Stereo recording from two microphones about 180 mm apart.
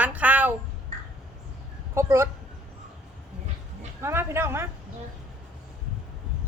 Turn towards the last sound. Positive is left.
turn(degrees=-15)  # may be behind; listen again after turning